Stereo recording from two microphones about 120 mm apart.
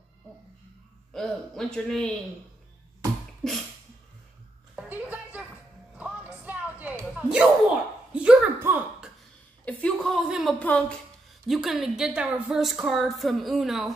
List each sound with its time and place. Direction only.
1.1 s a woman's voice: 5° left (ahead or behind)
3.4 s a woman's voice: 5° left (ahead or behind)
4.7 s a sound: 10° right (ahead or behind)
5.9 s music: 10° right (ahead or behind)
7.2 s a sound: 10° right (ahead or behind)
8.5 s a sound: 20° right (ahead or behind)
9.7 s speech: 10° left (ahead or behind)
10.6 s speech: 10° left (ahead or behind)
11.4 s a woman's voice: centre (ahead or behind)